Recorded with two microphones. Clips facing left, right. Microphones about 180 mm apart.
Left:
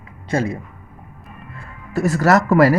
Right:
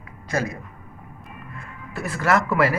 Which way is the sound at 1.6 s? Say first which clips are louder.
Left 11 dB; 40° left (ahead or behind).